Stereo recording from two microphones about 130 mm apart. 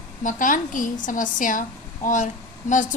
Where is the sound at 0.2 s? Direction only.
90° left.